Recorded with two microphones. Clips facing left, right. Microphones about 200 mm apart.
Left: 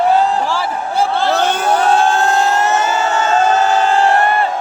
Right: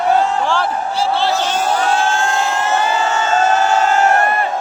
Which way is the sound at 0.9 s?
50° left (ahead or behind).